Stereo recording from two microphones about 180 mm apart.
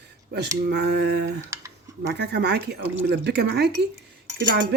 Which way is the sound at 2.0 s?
70° right (ahead or behind).